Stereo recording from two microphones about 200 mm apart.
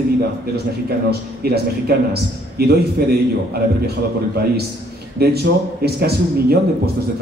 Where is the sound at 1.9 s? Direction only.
50° right (ahead or behind).